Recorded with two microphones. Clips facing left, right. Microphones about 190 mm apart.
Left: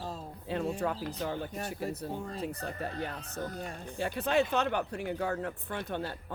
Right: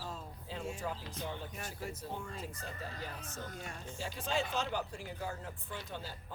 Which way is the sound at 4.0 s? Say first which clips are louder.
Left 8 dB; 60° left (ahead or behind).